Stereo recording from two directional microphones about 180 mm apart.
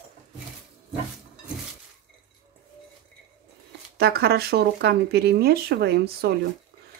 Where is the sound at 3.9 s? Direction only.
60° right (ahead or behind).